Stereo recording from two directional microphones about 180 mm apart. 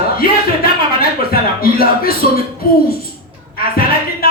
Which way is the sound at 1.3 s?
55° left (ahead or behind).